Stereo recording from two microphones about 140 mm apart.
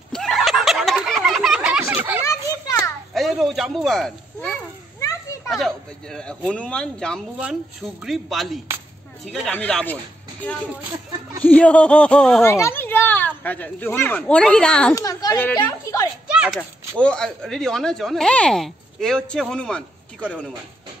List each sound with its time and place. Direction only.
0.1 s a sound: 5° left (ahead or behind); by 2.2 s 10° right (ahead or behind)
2.2 s children playing: 20° left (ahead or behind)
3.2 s a sound: centre (ahead or behind)
5.0 s children playing: 20° left (ahead or behind)
5.5 s speech: centre (ahead or behind)
7.3 s speech: 5° right (ahead or behind)
11.4 s speech: 10° left (ahead or behind)
12.4 s speech: 20° left (ahead or behind)
15.0 s speech: 25° left (ahead or behind)
15.5 s a sound: 25° left (ahead or behind)
16.3 s a sound: 10° right (ahead or behind)
17.0 s speech: 5° left (ahead or behind)